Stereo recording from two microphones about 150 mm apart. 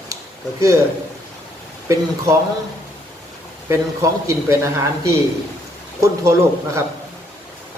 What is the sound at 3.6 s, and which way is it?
A man's voice, 20° right (ahead or behind).